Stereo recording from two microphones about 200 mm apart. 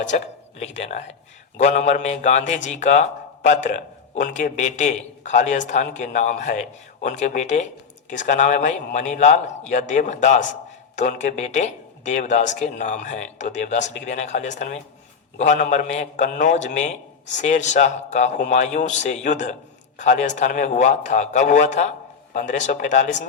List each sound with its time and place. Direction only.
0.6 s a man's voice: 35° left (ahead or behind)